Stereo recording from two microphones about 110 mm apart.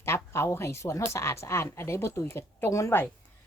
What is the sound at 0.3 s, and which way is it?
Speech, 25° left (ahead or behind).